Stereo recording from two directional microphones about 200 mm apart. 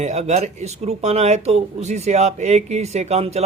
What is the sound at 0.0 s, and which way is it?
Speech, 35° right (ahead or behind).